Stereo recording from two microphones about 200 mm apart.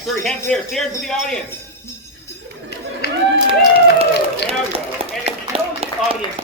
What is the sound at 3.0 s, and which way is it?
Run, 55° left (ahead or behind).